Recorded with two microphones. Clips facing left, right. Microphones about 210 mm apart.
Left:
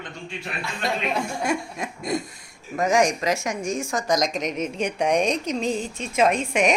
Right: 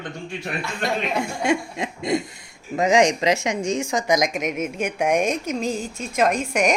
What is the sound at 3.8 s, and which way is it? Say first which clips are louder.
A woman's voice: right 1 dB; 15° right (ahead or behind).